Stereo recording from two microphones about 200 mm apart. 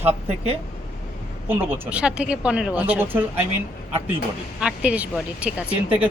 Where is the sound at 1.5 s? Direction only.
10° right (ahead or behind).